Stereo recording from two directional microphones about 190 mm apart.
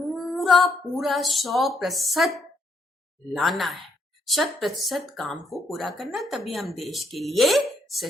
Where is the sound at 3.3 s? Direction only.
Centre (ahead or behind).